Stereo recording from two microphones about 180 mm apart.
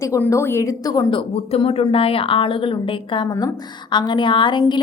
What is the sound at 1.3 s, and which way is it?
A woman's voice, 35° left (ahead or behind).